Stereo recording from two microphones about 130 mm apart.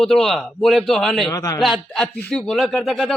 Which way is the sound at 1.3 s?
30° left (ahead or behind).